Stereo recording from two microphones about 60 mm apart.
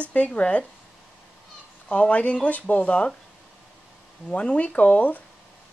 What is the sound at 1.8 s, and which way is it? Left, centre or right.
Speech, left.